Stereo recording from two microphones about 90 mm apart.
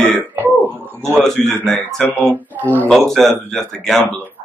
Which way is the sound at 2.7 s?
20° left (ahead or behind).